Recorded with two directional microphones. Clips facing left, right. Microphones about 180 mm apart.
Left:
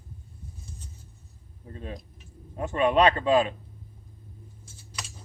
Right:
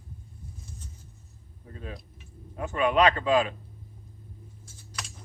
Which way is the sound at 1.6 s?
30° left (ahead or behind).